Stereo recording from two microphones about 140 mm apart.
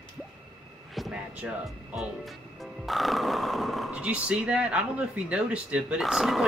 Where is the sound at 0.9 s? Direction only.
Centre (ahead or behind).